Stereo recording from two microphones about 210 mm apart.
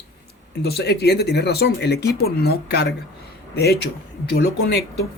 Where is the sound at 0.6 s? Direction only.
50° left (ahead or behind).